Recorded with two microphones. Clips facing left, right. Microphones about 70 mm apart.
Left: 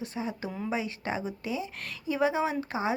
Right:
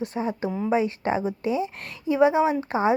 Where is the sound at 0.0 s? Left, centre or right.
Right.